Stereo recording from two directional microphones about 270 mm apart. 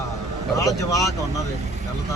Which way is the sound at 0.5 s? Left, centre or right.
Centre.